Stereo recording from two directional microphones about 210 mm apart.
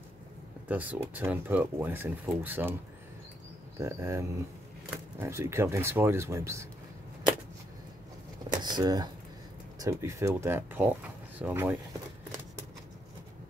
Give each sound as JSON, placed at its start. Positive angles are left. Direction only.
{"t": 0.7, "sound": "speech", "side_deg": -5}
{"t": 3.7, "sound": "speech", "side_deg": -15}
{"t": 8.6, "sound": "speech", "side_deg": -20}